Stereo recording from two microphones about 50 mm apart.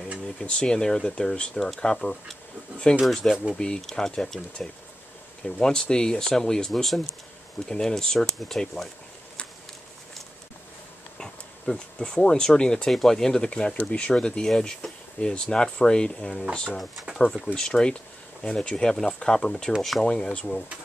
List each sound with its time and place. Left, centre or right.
0.4 s speech: centre
3.5 s speech: centre
11.1 s speech: centre
16.9 s speech: centre
17.6 s speech: centre
19.8 s speech: centre
20.1 s speech: centre